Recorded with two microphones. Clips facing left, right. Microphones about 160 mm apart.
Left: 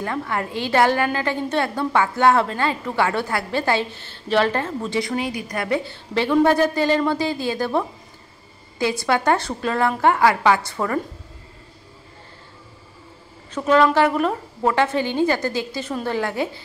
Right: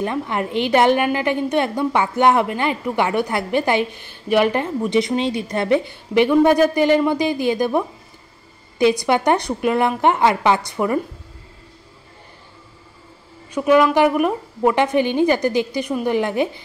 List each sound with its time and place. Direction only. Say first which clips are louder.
0.0 s a woman's voice: right 3 dB; 20° right (ahead or behind)
13.5 s a woman's voice: right 2 dB; 10° right (ahead or behind)